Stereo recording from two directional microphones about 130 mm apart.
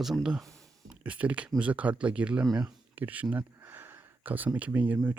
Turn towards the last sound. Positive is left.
turn(degrees=-10)  # may be behind; listen again after turning